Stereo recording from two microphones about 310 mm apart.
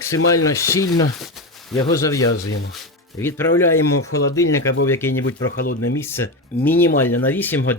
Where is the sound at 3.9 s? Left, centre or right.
Left.